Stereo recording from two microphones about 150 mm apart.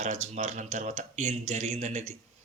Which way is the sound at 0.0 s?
50° right (ahead or behind).